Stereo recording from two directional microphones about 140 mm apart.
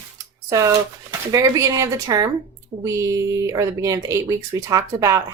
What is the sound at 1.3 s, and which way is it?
Speech, 25° right (ahead or behind).